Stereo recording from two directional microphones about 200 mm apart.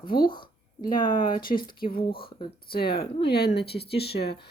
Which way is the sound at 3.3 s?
50° left (ahead or behind).